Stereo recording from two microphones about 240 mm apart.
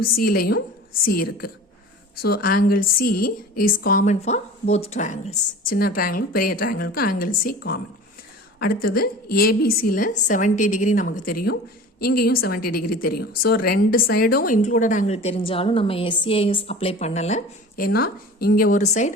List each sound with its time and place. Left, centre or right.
0.0 s a woman's voice: left